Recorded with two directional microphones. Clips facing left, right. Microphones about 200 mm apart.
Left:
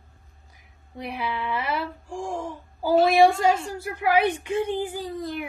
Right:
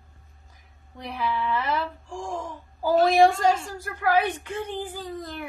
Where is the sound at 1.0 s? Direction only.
15° left (ahead or behind).